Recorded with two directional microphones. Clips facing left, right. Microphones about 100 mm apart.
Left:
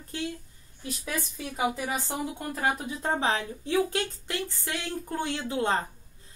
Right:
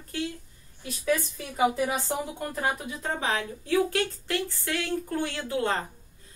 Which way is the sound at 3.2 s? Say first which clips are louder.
Left 1 dB; 30° left (ahead or behind).